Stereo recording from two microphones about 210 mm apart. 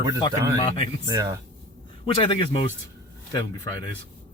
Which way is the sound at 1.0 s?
15° right (ahead or behind).